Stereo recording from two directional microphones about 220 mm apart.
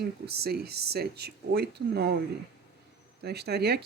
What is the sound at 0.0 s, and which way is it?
Speech, 45° right (ahead or behind).